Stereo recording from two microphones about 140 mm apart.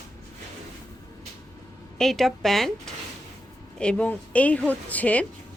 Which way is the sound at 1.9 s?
Centre (ahead or behind).